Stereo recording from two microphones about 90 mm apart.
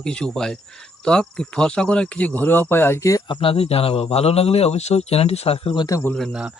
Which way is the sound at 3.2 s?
70° left (ahead or behind).